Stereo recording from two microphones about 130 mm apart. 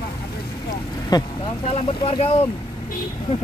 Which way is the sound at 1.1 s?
30° left (ahead or behind).